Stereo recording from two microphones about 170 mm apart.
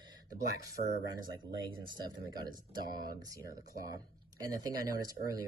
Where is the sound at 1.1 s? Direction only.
30° right (ahead or behind).